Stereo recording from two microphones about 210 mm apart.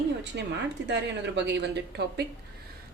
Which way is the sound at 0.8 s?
55° right (ahead or behind).